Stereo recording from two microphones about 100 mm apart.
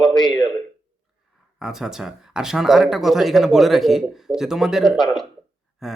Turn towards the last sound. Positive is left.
turn(degrees=0)  # may be behind; listen again after turning